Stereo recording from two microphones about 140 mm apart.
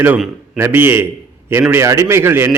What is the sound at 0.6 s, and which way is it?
A man's voice, 15° right (ahead or behind).